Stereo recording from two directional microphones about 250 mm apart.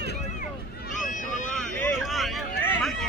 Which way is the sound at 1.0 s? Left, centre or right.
Left.